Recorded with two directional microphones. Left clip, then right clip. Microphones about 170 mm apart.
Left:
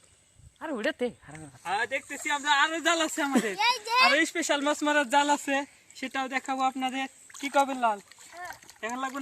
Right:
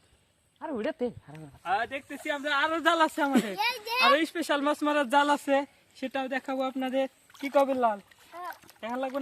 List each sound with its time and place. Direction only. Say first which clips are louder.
0.6 s speech: left 2 dB; 10° right (ahead or behind)
3.6 s a child's voice: left 4 dB; centre (ahead or behind)
4.1 s speech: even; 15° right (ahead or behind)